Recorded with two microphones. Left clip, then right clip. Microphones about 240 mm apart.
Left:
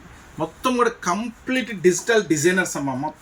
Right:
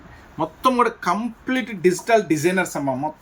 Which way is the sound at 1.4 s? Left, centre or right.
Right.